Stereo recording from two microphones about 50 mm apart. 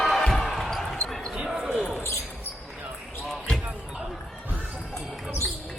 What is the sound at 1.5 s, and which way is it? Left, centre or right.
Basketball bounce, centre.